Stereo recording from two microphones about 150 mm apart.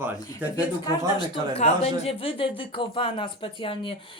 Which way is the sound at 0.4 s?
10° right (ahead or behind).